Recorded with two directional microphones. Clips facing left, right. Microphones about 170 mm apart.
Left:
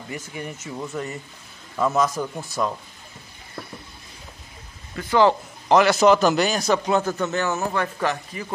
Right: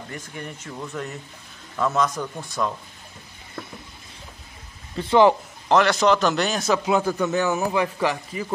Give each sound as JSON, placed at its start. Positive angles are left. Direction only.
{"t": 0.1, "sound": "a man's voice", "side_deg": 5}
{"t": 4.9, "sound": "speech", "side_deg": -25}
{"t": 5.7, "sound": "a man's voice", "side_deg": 5}